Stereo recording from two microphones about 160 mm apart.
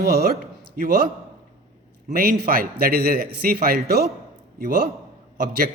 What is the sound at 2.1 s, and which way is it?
A man's voice, 70° right (ahead or behind).